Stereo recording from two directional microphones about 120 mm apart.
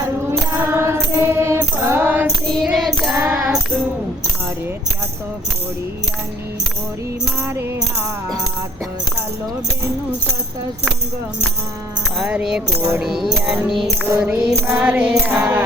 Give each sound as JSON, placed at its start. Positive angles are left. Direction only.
{"t": 0.3, "sound": "music", "side_deg": -20}
{"t": 2.2, "sound": "music", "side_deg": 0}
{"t": 3.2, "sound": "music", "side_deg": -15}
{"t": 12.2, "sound": "speech", "side_deg": -5}
{"t": 13.7, "sound": "music", "side_deg": 0}